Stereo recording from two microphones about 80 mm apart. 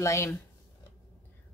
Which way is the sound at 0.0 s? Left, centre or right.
Left.